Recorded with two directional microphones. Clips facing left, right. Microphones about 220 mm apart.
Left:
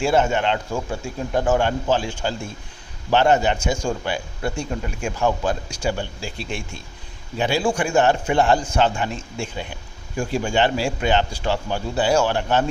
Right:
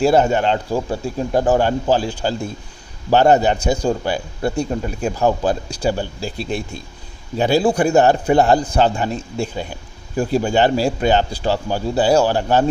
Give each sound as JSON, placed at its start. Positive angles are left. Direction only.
{"t": 0.0, "sound": "speech", "side_deg": -40}